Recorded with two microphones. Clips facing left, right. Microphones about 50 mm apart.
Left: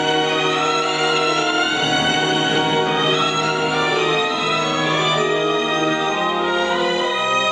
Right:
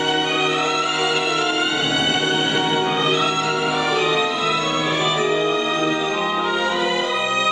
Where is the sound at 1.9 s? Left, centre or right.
Left.